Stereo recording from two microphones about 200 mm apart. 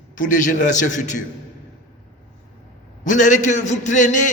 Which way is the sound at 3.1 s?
40° left (ahead or behind).